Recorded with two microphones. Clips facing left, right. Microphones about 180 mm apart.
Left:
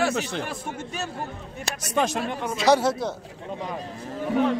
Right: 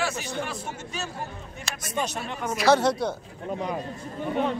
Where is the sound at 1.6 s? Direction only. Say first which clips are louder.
Left 5 dB; 80° left.